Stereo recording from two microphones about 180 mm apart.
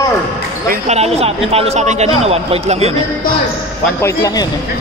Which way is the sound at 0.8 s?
35° right (ahead or behind).